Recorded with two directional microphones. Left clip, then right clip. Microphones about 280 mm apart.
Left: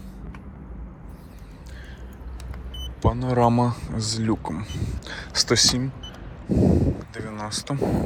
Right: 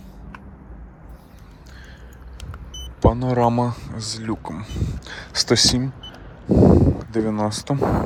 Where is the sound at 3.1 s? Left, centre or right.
Centre.